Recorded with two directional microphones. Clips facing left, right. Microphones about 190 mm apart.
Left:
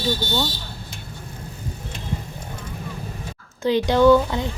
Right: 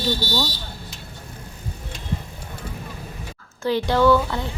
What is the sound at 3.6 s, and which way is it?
Speech, 20° left (ahead or behind).